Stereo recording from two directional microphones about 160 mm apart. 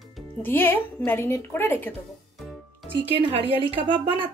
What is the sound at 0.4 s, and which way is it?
Speech, 15° left (ahead or behind).